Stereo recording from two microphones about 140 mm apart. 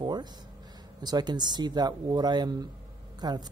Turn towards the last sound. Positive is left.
turn(degrees=-30)  # may be behind; listen again after turning